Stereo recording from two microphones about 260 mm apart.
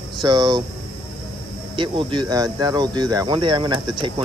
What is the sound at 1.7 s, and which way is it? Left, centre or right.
Speech, centre.